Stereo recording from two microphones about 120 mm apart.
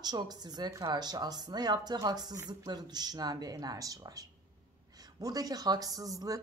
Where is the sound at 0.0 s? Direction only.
35° right (ahead or behind).